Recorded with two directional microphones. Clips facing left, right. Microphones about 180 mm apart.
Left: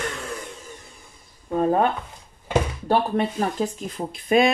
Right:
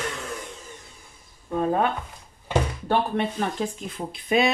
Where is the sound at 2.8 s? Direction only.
40° left (ahead or behind).